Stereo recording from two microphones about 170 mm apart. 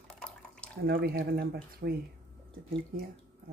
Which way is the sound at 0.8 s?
65° right (ahead or behind).